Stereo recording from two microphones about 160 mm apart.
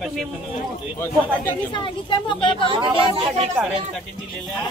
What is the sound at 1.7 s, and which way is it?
Speech, 30° left (ahead or behind).